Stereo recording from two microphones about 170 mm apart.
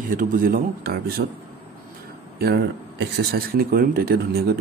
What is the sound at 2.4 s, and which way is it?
Speech, 70° right (ahead or behind).